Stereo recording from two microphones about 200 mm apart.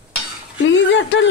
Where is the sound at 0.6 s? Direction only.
65° left (ahead or behind).